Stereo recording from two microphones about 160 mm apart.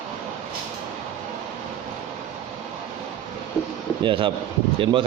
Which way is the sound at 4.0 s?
30° right (ahead or behind).